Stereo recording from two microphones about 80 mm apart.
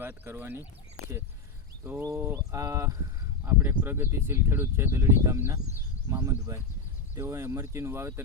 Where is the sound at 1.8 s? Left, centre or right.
Right.